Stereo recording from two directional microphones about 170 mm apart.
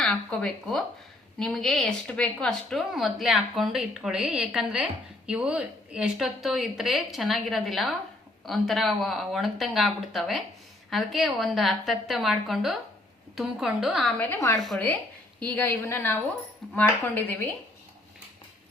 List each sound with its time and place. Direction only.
0.0 s a woman's voice: 5° left (ahead or behind)
14.3 s a woman's voice: 20° left (ahead or behind)